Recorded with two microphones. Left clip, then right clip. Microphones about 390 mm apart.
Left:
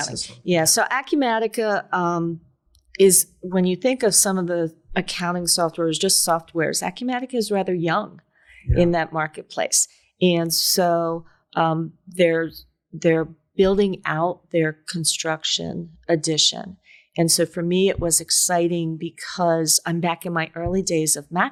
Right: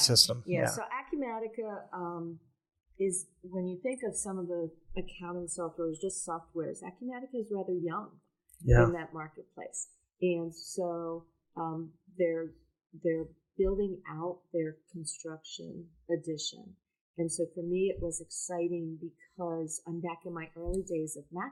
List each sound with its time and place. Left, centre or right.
0.4 s a woman's voice: left